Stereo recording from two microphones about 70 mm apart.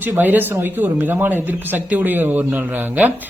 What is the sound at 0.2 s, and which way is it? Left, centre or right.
Speech, right.